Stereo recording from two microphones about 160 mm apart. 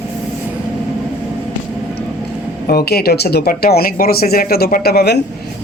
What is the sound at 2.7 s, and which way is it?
Speech, 75° left (ahead or behind).